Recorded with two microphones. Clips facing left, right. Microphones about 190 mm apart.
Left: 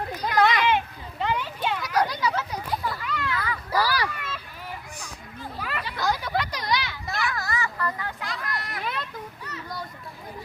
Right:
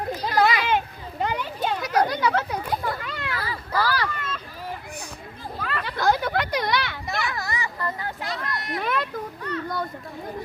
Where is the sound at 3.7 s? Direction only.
10° left (ahead or behind).